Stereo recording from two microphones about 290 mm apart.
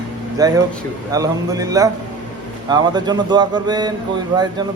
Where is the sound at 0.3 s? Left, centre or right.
Centre.